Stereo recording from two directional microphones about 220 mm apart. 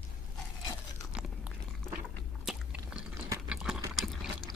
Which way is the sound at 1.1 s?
5° right (ahead or behind).